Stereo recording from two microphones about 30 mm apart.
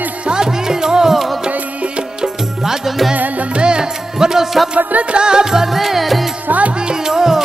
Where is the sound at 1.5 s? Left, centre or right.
Right.